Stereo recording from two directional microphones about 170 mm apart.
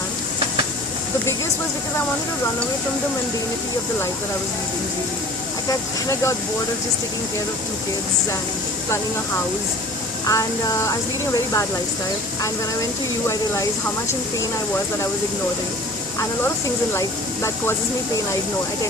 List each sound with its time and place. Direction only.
5.6 s speech: 20° left (ahead or behind)
10.2 s speech: 15° left (ahead or behind)
13.2 s speech: 15° left (ahead or behind)
16.9 s speech: 15° left (ahead or behind)